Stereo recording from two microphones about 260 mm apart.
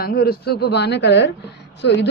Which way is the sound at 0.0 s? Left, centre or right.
Left.